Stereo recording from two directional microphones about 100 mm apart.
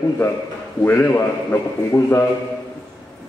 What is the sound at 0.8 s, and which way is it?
A man's voice, 20° left (ahead or behind).